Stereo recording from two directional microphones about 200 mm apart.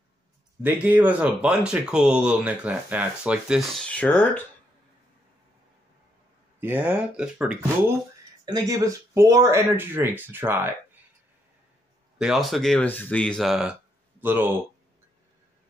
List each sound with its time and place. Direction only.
0.6 s speech: 10° right (ahead or behind); by 4.4 s 10° left (ahead or behind)
6.6 s speech: 10° right (ahead or behind)
8.5 s speech: 20° right (ahead or behind)
12.2 s speech: centre (ahead or behind)